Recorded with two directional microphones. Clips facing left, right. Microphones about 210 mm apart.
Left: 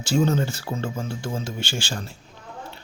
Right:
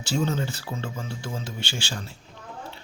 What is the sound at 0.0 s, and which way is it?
Speech, 45° left (ahead or behind).